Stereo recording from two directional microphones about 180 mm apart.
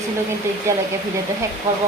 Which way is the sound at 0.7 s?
15° right (ahead or behind).